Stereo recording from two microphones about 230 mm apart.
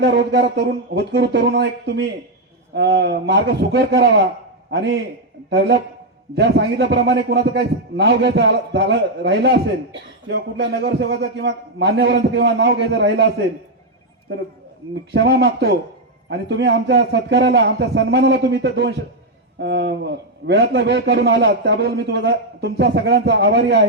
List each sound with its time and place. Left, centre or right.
0.0 s a man's voice: right
5.5 s a man's voice: right
15.1 s a man's voice: right